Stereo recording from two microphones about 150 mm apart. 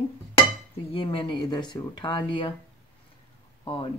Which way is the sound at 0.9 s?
35° left (ahead or behind).